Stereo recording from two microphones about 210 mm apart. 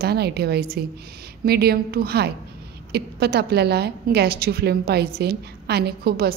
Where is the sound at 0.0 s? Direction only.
50° right (ahead or behind).